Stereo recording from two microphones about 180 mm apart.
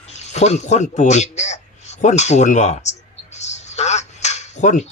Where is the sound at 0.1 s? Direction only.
40° left (ahead or behind).